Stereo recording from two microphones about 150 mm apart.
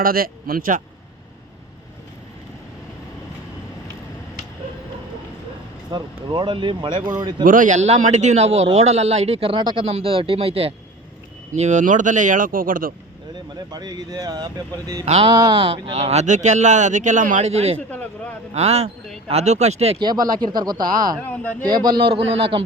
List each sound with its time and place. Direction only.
0.0 s speech: 75° right (ahead or behind)
5.9 s speech: 30° right (ahead or behind)
7.4 s a man's voice: 60° right (ahead or behind); by 10.8 s 40° right (ahead or behind)
11.5 s speech: 50° right (ahead or behind); by 12.9 s 70° right (ahead or behind)
13.7 s speech: 25° right (ahead or behind)
15.0 s a man's voice: 45° right (ahead or behind)
15.3 s a man's voice: 30° right (ahead or behind); by 17.7 s 45° right (ahead or behind)
17.7 s speech: 10° left (ahead or behind)
18.5 s a man's voice: 45° right (ahead or behind)
20.0 s speech: 25° right (ahead or behind)